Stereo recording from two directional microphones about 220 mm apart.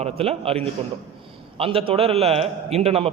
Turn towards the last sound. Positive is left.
turn(degrees=-25)  # may be behind; listen again after turning